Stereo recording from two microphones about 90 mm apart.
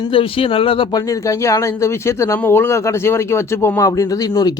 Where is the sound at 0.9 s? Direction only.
40° left (ahead or behind).